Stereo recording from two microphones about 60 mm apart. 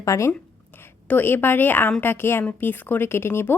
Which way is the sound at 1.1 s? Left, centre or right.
Left.